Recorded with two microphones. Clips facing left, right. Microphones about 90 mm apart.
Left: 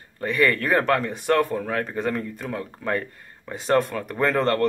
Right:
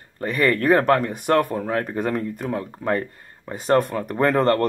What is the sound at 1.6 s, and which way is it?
Speech, 25° right (ahead or behind).